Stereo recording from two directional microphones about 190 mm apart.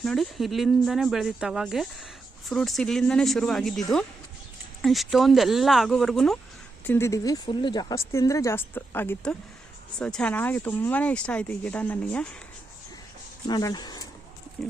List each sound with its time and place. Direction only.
0.0 s speech: centre (ahead or behind)
6.8 s speech: 10° left (ahead or behind)
13.5 s speech: 20° left (ahead or behind)
14.6 s speech: 5° left (ahead or behind)